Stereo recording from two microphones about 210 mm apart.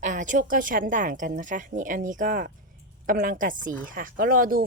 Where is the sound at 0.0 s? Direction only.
40° right (ahead or behind).